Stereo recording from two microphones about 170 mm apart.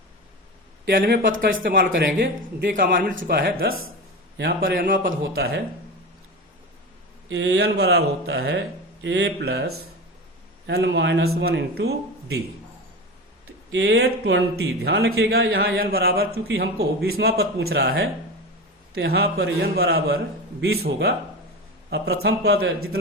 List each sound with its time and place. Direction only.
0.9 s a man's voice: 60° right (ahead or behind)
7.3 s speech: 90° right; by 9.8 s 70° right (ahead or behind)
10.7 s speech: 80° right
13.7 s speech: 85° right; by 23.0 s 70° right (ahead or behind)